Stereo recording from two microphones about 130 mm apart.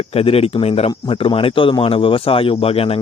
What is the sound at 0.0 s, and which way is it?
Speech, 50° left (ahead or behind).